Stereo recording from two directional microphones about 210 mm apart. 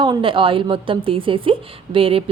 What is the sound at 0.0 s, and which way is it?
A woman's voice, 25° right (ahead or behind).